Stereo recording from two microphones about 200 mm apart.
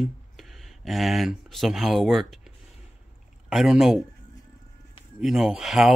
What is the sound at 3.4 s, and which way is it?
Speech, centre (ahead or behind).